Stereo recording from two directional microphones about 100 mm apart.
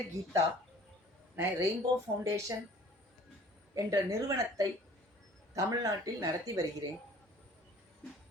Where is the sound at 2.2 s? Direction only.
30° right (ahead or behind).